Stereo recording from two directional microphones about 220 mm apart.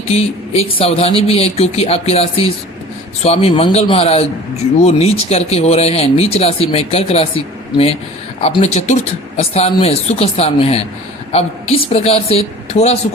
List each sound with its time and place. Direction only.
0.1 s speech: 25° left (ahead or behind)